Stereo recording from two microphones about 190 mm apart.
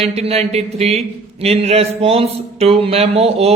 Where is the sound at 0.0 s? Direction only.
30° right (ahead or behind).